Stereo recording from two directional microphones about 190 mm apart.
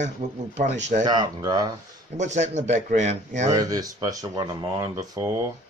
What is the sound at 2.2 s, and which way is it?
Speech, 40° right (ahead or behind).